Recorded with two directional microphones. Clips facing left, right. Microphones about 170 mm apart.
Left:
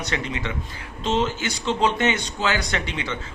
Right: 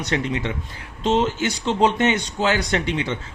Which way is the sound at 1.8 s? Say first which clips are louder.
Right 4 dB; 50° right (ahead or behind).